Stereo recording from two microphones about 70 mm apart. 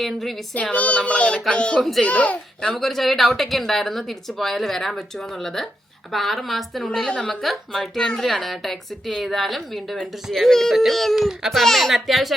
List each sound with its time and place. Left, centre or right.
0.0 s a woman's voice: centre
0.5 s a sound: centre
1.8 s a woman's voice: centre
2.0 s speech: centre
2.7 s a woman's voice: centre